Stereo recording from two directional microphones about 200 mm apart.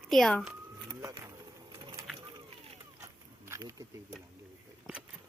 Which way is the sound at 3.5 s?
15° right (ahead or behind).